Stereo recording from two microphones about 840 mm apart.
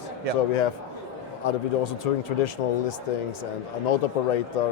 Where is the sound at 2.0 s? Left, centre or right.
Left.